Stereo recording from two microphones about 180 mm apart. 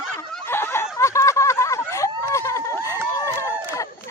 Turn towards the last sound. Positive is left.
turn(degrees=15)  # may be behind; listen again after turning